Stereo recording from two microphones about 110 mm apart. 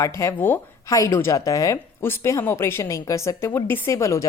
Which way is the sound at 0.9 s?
30° left (ahead or behind).